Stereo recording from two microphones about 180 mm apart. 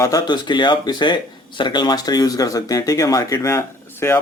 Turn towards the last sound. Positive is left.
turn(degrees=15)  # may be behind; listen again after turning